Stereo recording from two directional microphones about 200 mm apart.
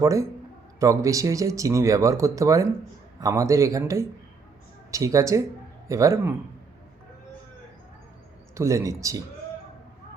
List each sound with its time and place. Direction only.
0.0 s speech: 15° right (ahead or behind)
8.5 s speech: 15° right (ahead or behind)